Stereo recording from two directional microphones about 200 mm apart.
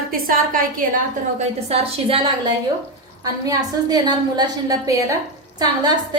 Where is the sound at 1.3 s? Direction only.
30° right (ahead or behind).